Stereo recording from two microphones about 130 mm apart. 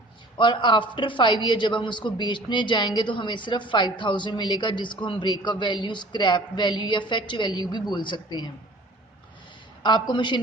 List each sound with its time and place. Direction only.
0.3 s a woman's voice: 40° left (ahead or behind)
9.8 s a woman's voice: 35° left (ahead or behind)